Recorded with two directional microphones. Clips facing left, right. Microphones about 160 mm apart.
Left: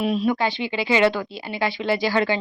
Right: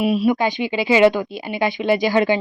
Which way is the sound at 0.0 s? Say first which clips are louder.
Right 4 dB; 10° right (ahead or behind).